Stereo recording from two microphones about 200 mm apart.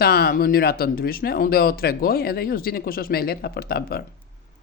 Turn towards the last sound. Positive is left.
turn(degrees=50)  # may be behind; listen again after turning